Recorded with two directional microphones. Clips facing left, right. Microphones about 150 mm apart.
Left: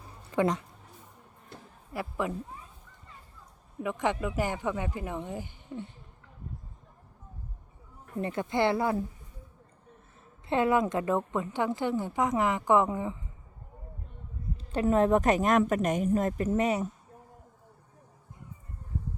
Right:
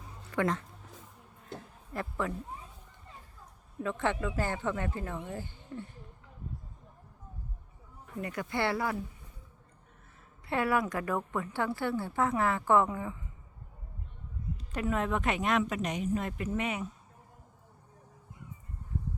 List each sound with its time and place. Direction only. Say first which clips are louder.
0.3 s speech: left 3 dB; 15° left (ahead or behind)
1.9 s speech: left 2 dB; 10° left (ahead or behind)
3.8 s speech: left 2 dB; 15° left (ahead or behind)
8.2 s a woman's voice: left 5 dB; 25° left (ahead or behind)
10.5 s a woman's voice: left 4 dB; 20° left (ahead or behind)
14.6 s a woman's voice: left 8 dB; 30° left (ahead or behind)